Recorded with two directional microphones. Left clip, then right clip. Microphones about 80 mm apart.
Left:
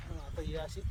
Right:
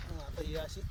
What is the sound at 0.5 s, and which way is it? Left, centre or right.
Speech, left.